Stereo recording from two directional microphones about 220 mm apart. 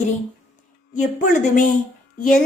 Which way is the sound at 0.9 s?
35° left (ahead or behind).